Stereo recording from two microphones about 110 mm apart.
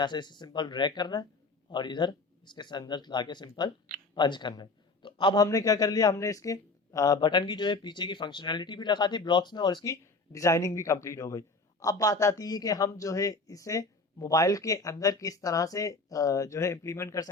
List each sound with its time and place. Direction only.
0.0 s a man's voice: 45° left (ahead or behind)
9.8 s speech: 30° left (ahead or behind)